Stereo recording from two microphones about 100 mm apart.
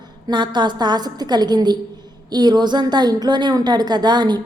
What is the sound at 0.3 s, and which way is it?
A woman's voice, 50° right (ahead or behind).